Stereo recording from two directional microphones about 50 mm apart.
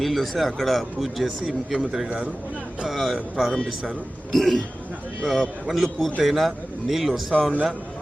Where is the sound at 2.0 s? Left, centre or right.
Right.